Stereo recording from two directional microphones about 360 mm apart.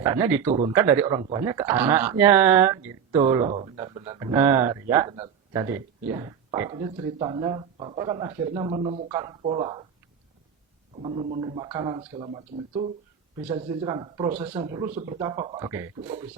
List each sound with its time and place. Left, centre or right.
0.0 s speech: centre
10.9 s speech: centre